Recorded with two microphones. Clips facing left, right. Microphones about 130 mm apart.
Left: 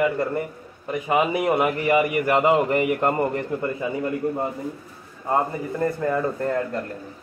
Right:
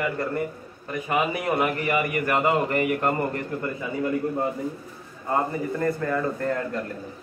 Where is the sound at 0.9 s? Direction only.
20° left (ahead or behind).